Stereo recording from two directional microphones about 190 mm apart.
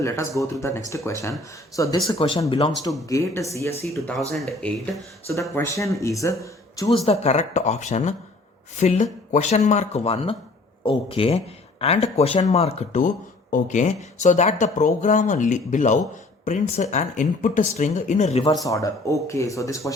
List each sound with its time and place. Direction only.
0.0 s speech: 15° left (ahead or behind)
2.0 s speech: 25° left (ahead or behind)
3.1 s speech: 15° left (ahead or behind)
4.3 s speech: 5° left (ahead or behind)
5.3 s speech: 15° left (ahead or behind)
6.9 s speech: 35° left (ahead or behind)
18.6 s speech: 15° left (ahead or behind)